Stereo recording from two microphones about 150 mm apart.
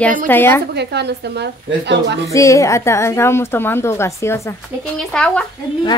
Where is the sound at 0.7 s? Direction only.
90° right.